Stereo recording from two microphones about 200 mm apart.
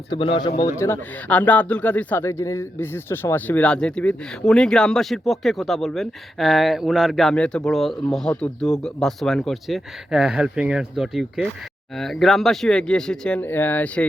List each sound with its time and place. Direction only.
0.1 s speech: 25° left (ahead or behind)
0.6 s speech: 15° left (ahead or behind)